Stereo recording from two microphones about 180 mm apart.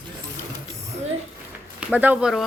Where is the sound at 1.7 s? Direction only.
10° right (ahead or behind).